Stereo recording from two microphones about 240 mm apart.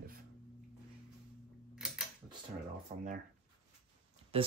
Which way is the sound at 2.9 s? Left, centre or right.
Right.